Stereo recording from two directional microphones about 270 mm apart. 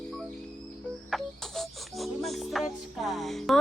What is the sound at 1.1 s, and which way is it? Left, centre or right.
Music, centre.